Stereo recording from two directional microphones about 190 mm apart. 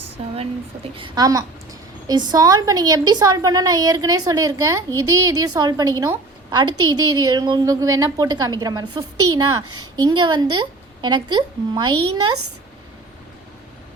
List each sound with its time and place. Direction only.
0.2 s a woman's voice: 30° right (ahead or behind)